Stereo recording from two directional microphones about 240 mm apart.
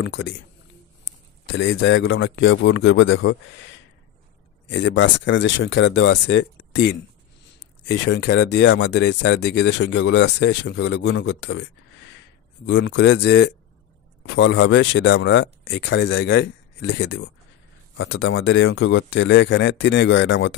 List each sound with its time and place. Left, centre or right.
0.0 s speech: left
1.4 s speech: left
12.6 s speech: left